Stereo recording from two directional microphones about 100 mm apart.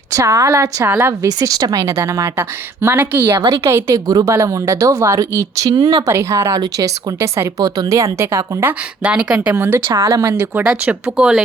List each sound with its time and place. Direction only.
0.1 s speech: 35° right (ahead or behind); by 3.3 s 15° right (ahead or behind)
3.6 s speech: 30° right (ahead or behind)
5.7 s speech: 45° right (ahead or behind)
6.1 s a woman's voice: 25° right (ahead or behind)
6.5 s a woman's voice: 40° right (ahead or behind)
9.0 s speech: 10° right (ahead or behind)
9.6 s a woman's voice: 25° right (ahead or behind)
10.3 s a woman's voice: 20° right (ahead or behind)